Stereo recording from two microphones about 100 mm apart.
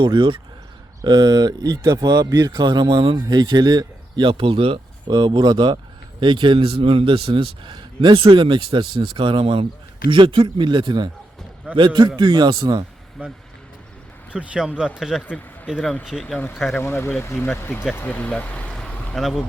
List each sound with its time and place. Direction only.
0.0 s speech: 60° right (ahead or behind)
1.0 s speech: 45° right (ahead or behind); by 4.8 s 70° right (ahead or behind)
5.0 s speech: 45° right (ahead or behind)
14.3 s speech: 10° right (ahead or behind)
16.7 s speech: 25° left (ahead or behind)
19.1 s speech: centre (ahead or behind)